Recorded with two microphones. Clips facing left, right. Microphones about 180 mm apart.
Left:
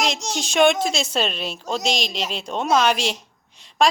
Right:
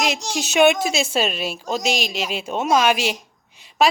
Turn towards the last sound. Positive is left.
turn(degrees=-5)  # may be behind; listen again after turning